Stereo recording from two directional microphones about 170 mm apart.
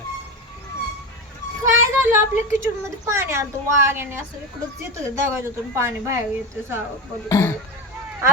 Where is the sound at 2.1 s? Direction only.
15° right (ahead or behind).